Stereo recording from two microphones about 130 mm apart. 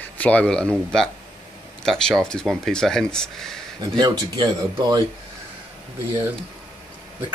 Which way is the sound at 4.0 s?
30° right (ahead or behind).